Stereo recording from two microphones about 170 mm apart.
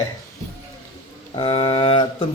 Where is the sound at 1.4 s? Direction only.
30° left (ahead or behind).